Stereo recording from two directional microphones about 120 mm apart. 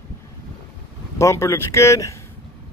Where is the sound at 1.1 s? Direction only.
25° left (ahead or behind).